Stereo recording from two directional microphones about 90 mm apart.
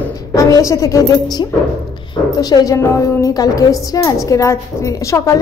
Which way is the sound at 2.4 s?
40° left (ahead or behind).